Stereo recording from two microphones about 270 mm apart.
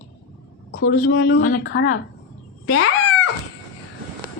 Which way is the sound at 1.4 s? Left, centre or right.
Left.